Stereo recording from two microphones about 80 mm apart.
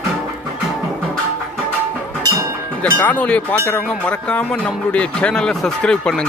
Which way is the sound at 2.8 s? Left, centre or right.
Centre.